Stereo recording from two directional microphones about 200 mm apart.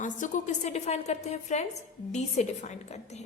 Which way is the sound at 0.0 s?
40° left (ahead or behind).